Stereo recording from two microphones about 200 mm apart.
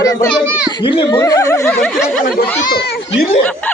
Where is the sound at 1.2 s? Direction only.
15° left (ahead or behind).